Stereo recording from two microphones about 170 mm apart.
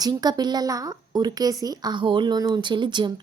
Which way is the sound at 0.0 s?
25° right (ahead or behind).